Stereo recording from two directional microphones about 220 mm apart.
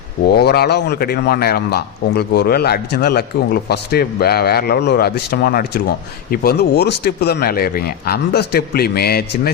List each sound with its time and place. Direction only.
0.3 s speech: 45° left (ahead or behind)